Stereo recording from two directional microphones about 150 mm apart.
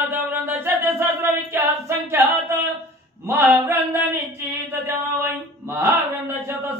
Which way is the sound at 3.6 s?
15° right (ahead or behind).